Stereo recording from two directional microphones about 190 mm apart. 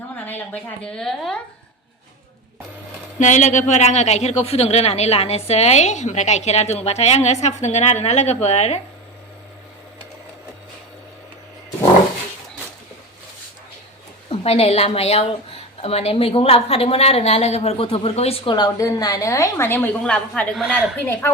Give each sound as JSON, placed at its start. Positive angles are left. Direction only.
{"t": 0.3, "sound": "a woman's voice", "side_deg": 10}
{"t": 3.2, "sound": "speech", "side_deg": 40}
{"t": 14.3, "sound": "speech", "side_deg": 30}